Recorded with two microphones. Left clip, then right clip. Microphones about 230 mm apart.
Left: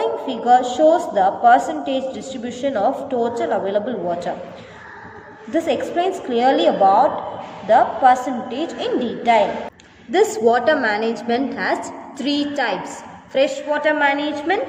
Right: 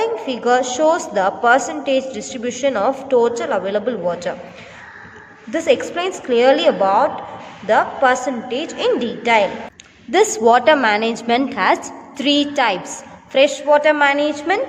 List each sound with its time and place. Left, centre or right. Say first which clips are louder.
0.0 s a woman's voice: right 2 dB; right
5.5 s a woman's voice: right 3 dB; right